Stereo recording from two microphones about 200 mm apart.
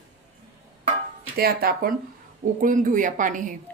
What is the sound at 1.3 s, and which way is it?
A woman's voice, 50° right (ahead or behind).